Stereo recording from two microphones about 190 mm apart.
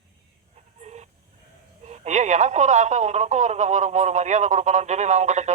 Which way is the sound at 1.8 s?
35° right (ahead or behind).